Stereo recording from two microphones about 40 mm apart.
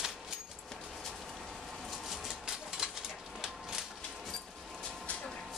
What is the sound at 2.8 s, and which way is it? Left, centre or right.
Pigeon, right.